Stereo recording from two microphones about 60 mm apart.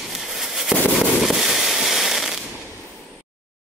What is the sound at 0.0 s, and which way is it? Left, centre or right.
Fireworks, centre.